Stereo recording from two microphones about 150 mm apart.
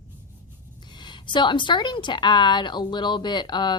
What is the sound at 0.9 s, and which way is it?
A woman's voice, 30° left (ahead or behind).